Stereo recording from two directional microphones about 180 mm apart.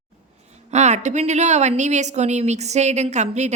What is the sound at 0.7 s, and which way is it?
A woman's voice, 40° right (ahead or behind).